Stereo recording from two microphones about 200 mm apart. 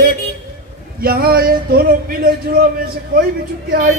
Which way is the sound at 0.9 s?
50° right (ahead or behind).